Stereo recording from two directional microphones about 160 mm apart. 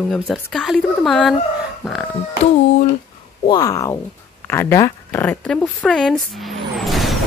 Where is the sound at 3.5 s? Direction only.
20° left (ahead or behind).